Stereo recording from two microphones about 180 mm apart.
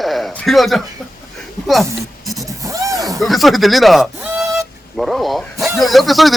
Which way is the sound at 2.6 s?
20° right (ahead or behind).